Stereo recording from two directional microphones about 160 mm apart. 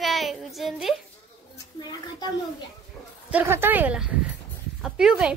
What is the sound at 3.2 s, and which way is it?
A woman's voice, 10° right (ahead or behind).